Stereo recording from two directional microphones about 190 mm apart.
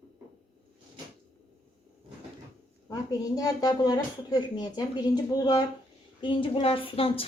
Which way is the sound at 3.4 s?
20° left (ahead or behind).